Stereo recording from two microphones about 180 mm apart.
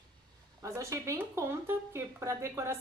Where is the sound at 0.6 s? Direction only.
15° right (ahead or behind).